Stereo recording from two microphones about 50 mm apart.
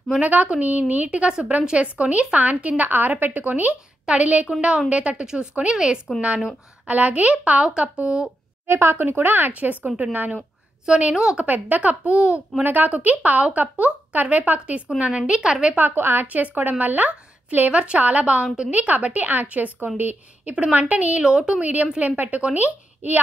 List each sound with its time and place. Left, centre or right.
0.2 s a woman's voice: right
1.2 s a woman's voice: right
6.1 s a woman's voice: centre
6.9 s a woman's voice: right
8.6 s speech: right
8.9 s a woman's voice: right
10.9 s a woman's voice: centre
11.3 s a woman's voice: right
12.6 s a woman's voice: right; by 15.7 s centre
15.7 s a woman's voice: right
21.2 s a woman's voice: centre
21.9 s a woman's voice: right